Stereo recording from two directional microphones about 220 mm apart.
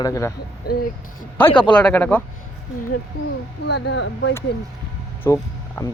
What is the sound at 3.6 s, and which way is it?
Speech, 50° left (ahead or behind).